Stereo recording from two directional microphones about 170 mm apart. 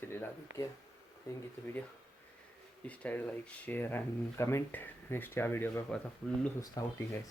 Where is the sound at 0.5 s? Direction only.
90° right.